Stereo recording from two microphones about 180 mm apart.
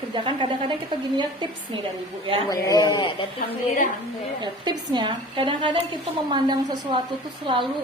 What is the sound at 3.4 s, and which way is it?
Speech, 50° left (ahead or behind).